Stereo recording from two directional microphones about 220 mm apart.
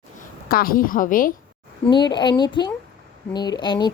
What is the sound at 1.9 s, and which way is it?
Speech, 20° left (ahead or behind).